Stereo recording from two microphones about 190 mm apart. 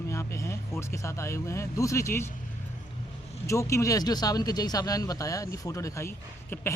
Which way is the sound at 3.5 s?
15° left (ahead or behind).